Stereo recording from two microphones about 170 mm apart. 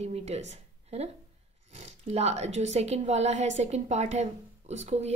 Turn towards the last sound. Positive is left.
turn(degrees=-40)  # may be behind; listen again after turning